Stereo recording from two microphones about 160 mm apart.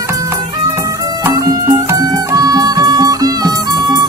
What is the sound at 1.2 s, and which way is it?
Music, 20° right (ahead or behind).